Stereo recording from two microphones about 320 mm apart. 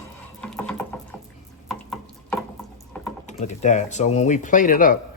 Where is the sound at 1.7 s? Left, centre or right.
Centre.